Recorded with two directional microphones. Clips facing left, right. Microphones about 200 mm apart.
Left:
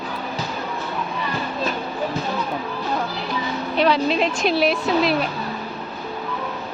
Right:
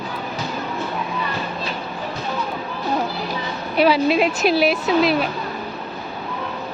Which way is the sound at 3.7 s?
5° right (ahead or behind).